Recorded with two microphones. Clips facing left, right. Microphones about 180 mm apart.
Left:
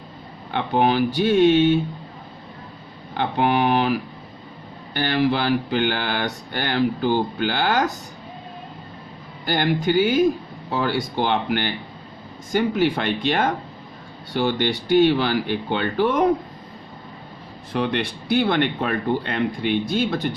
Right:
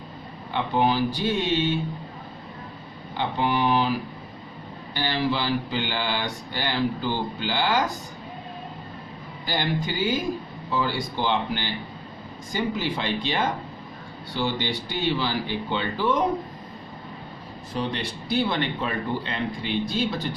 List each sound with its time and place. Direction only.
0.5 s speech: 60° left (ahead or behind)
3.2 s speech: 60° left (ahead or behind)
4.9 s speech: 55° left (ahead or behind)
9.5 s speech: 55° left (ahead or behind)
17.7 s speech: 60° left (ahead or behind)